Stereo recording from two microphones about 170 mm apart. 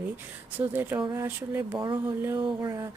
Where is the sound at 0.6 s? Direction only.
10° right (ahead or behind).